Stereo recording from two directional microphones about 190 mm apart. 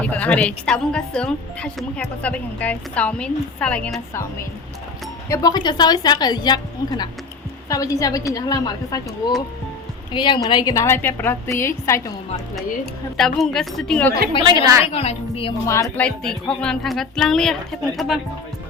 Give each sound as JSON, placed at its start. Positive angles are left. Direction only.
{"t": 0.0, "sound": "a woman's voice", "side_deg": 5}
{"t": 5.3, "sound": "a woman's voice", "side_deg": 20}
{"t": 12.5, "sound": "a woman's voice", "side_deg": 0}
{"t": 14.4, "sound": "a woman's voice", "side_deg": -20}
{"t": 14.8, "sound": "a woman's voice", "side_deg": 30}
{"t": 15.6, "sound": "a woman's voice", "side_deg": 15}